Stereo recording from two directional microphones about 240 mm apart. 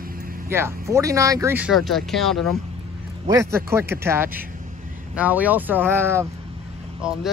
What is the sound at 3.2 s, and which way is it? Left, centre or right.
Speech, centre.